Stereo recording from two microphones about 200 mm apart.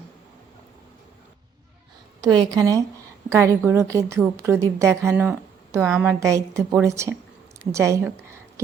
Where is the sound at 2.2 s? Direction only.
20° right (ahead or behind).